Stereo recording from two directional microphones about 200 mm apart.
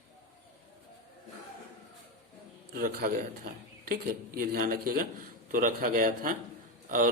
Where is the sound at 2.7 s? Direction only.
45° right (ahead or behind).